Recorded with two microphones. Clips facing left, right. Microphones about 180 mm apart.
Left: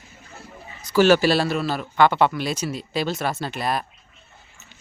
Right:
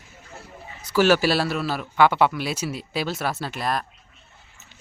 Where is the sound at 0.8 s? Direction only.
5° right (ahead or behind).